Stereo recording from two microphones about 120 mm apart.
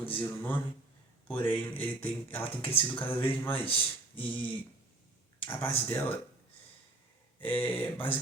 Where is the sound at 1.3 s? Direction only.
15° left (ahead or behind).